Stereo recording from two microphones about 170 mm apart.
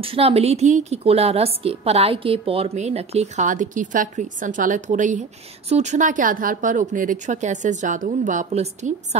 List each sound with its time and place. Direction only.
0.0 s a woman's voice: 35° right (ahead or behind)